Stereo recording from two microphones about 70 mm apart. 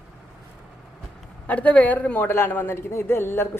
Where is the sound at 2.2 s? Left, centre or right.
Left.